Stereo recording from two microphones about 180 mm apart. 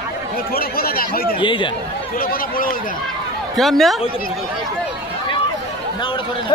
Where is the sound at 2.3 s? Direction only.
50° left (ahead or behind).